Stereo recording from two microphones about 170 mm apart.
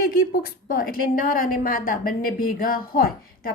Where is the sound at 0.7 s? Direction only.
55° left (ahead or behind).